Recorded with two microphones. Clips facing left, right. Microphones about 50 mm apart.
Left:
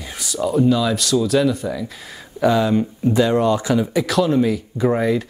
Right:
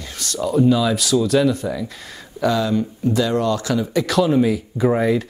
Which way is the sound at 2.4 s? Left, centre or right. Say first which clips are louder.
Left 2 dB; centre.